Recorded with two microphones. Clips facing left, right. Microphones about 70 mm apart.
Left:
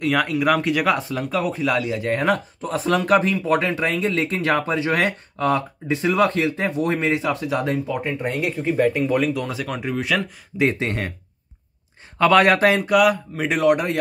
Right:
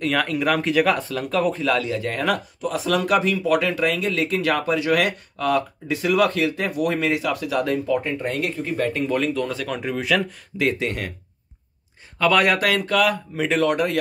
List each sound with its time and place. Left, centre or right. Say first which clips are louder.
0.0 s speech: left 2 dB; centre
1.7 s speech: left 1 dB; centre
7.9 s speech: right 1 dB; centre
10.6 s speech: left 2 dB; left
12.2 s speech: left 4 dB; left
12.8 s speech: left 3 dB; centre